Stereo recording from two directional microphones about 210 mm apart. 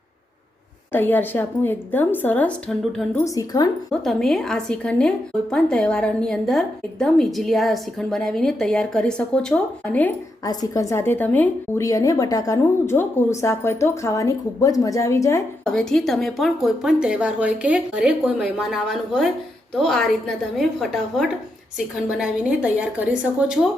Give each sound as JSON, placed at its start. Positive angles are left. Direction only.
{"t": 0.9, "sound": "a woman's voice", "side_deg": 10}
{"t": 3.2, "sound": "a woman's voice", "side_deg": 15}
{"t": 4.0, "sound": "a woman's voice", "side_deg": 0}
{"t": 10.4, "sound": "a woman's voice", "side_deg": 15}
{"t": 15.6, "sound": "a woman's voice", "side_deg": 0}